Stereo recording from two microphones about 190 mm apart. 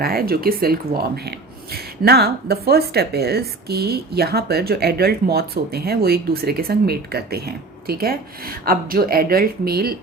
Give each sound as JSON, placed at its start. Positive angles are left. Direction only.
{"t": 0.0, "sound": "speech", "side_deg": -50}